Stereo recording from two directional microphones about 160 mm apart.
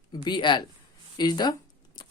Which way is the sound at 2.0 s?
25° left (ahead or behind).